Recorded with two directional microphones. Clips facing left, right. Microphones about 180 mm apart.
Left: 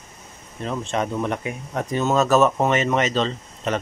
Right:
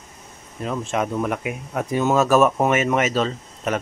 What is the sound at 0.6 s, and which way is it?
Speech, 5° right (ahead or behind).